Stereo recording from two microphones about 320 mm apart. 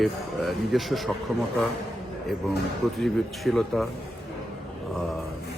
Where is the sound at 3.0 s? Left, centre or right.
Centre.